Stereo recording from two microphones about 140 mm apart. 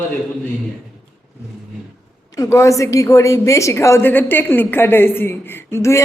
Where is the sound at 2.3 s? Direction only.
20° left (ahead or behind).